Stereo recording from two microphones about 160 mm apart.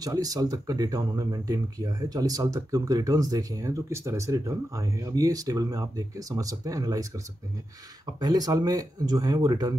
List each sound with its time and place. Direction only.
0.0 s speech: 25° right (ahead or behind)
8.2 s speech: 25° right (ahead or behind)